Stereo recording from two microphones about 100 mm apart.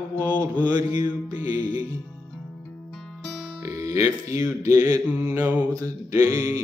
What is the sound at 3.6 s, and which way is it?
Speech, 35° right (ahead or behind).